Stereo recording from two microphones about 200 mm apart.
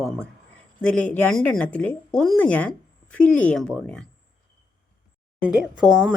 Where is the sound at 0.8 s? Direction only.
5° left (ahead or behind).